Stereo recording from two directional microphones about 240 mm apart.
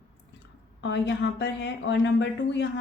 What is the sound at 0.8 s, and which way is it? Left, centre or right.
Speech, left.